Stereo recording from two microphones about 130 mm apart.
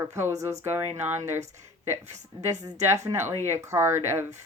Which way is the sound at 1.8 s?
20° right (ahead or behind).